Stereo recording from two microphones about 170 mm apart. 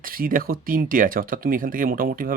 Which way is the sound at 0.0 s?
55° right (ahead or behind).